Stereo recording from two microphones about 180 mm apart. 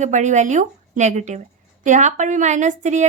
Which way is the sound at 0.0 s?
40° right (ahead or behind).